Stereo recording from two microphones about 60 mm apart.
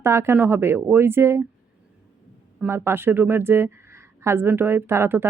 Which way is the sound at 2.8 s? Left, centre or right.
Right.